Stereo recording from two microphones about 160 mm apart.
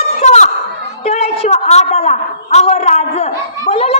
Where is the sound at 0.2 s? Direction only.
45° left (ahead or behind).